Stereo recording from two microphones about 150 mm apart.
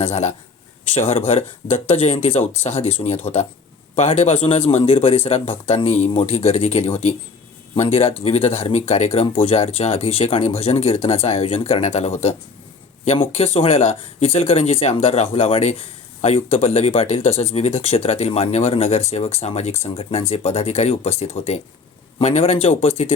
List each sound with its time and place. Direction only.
0.0 s speech: 45° left (ahead or behind)
13.3 s speech: 40° left (ahead or behind)